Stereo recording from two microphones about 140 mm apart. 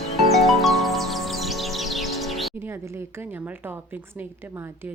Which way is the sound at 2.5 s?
20° right (ahead or behind).